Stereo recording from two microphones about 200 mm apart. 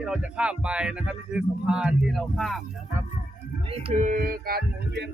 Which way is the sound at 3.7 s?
30° right (ahead or behind).